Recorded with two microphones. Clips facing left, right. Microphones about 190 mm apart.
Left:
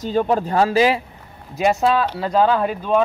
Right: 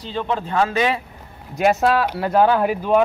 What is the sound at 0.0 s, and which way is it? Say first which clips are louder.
Speech: left 6 dB; 45° left (ahead or behind).